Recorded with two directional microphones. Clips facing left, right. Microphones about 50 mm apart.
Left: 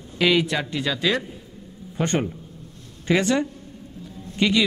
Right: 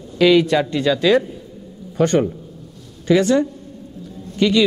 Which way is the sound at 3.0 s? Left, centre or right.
Left.